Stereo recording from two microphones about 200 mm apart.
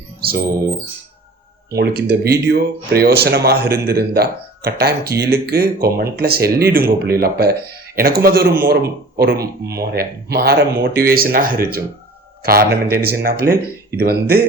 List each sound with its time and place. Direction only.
0.2 s speech: 50° right (ahead or behind)
1.7 s a man's voice: 50° right (ahead or behind)